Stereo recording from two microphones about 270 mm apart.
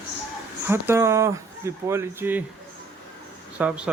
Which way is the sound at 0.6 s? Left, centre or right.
Centre.